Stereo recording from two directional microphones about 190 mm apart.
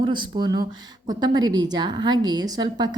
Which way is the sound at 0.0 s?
25° right (ahead or behind).